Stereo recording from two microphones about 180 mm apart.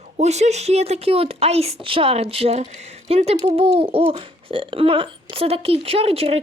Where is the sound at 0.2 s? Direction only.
40° right (ahead or behind).